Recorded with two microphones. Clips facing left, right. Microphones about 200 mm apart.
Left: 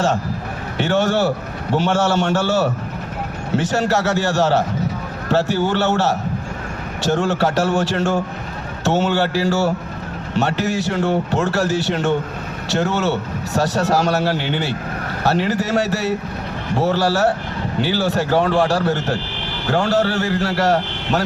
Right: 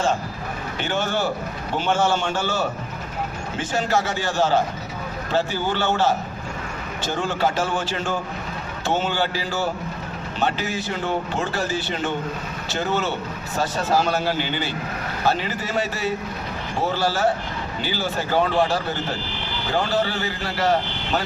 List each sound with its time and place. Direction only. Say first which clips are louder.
0.8 s a man's voice: left 7 dB; 70° left (ahead or behind)